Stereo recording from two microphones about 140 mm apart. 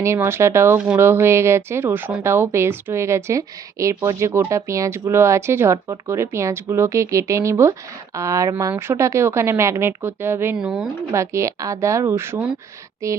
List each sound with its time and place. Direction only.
0.0 s a woman's voice: 20° right (ahead or behind)
10.6 s speech: 5° right (ahead or behind)
11.1 s speech: 20° right (ahead or behind)